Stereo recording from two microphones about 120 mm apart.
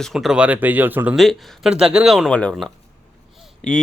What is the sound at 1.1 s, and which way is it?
Speech, centre (ahead or behind).